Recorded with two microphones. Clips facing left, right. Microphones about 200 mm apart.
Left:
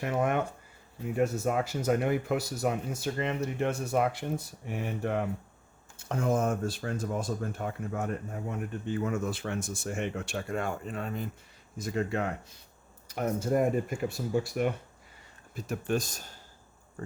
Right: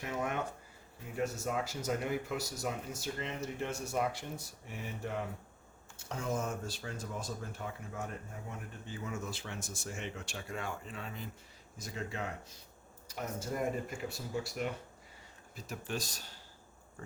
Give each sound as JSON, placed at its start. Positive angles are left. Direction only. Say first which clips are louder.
{"t": 0.0, "sound": "speech", "louder": "left 8 dB", "side_deg": 60}